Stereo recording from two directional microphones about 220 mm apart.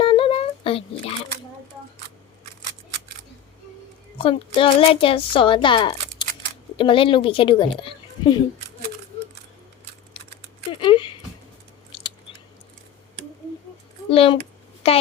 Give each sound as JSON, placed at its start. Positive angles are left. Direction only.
{"t": 0.0, "sound": "a sound", "side_deg": 25}
{"t": 4.2, "sound": "a child's voice", "side_deg": 25}
{"t": 10.7, "sound": "speech", "side_deg": 20}
{"t": 11.9, "sound": "chewing", "side_deg": 25}
{"t": 14.1, "sound": "a child's voice", "side_deg": 25}